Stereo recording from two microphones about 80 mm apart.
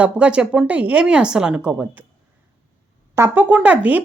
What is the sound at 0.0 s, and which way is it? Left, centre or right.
Speech, centre.